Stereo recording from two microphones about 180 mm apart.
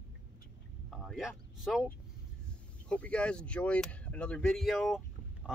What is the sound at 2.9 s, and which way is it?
Speech, 5° left (ahead or behind).